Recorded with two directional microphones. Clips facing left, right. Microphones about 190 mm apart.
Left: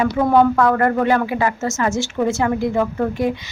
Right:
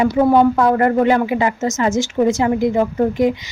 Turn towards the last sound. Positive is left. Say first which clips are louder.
# right 4 dB
turn(degrees=-15)  # may be behind; listen again after turning